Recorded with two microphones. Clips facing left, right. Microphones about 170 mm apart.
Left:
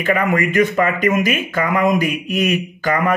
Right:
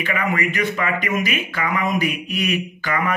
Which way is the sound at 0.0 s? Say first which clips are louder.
Left 5 dB; 45° left (ahead or behind).